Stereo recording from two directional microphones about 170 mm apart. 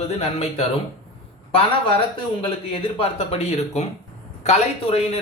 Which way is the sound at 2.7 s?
35° left (ahead or behind).